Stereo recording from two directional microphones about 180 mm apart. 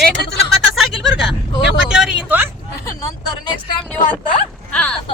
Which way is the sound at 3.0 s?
20° left (ahead or behind).